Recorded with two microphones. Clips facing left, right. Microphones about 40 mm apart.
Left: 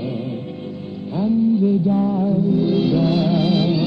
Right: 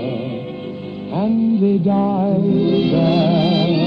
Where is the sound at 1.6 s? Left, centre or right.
Right.